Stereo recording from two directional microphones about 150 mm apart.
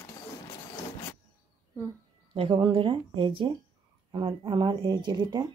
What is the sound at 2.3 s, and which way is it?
Speech, 35° right (ahead or behind).